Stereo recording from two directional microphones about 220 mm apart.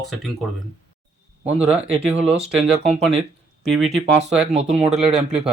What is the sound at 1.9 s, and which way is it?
Speech, 25° right (ahead or behind).